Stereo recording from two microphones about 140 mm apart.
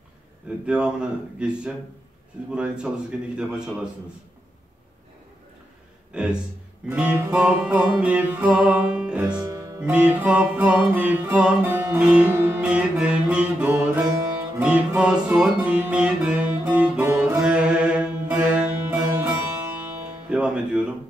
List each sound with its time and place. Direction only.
0.7 s music: 5° right (ahead or behind)
6.1 s music: 5° right (ahead or behind)
9.3 s music: 25° right (ahead or behind)
9.8 s music: 10° right (ahead or behind)
20.2 s music: 10° right (ahead or behind)